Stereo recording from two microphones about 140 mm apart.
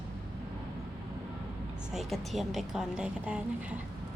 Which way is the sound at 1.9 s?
Centre (ahead or behind).